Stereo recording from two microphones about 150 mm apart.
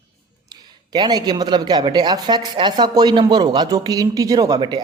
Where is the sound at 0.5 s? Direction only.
25° right (ahead or behind).